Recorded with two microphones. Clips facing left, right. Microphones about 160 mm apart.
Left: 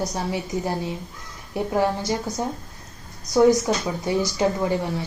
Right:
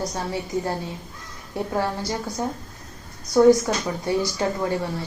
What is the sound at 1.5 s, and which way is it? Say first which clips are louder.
Speech: left 3 dB; 15° left (ahead or behind).